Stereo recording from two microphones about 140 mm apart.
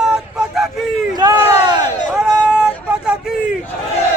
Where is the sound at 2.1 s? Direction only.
5° right (ahead or behind).